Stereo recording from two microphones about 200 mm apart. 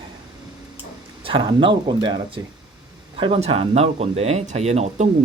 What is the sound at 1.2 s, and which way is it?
Speech, 25° right (ahead or behind).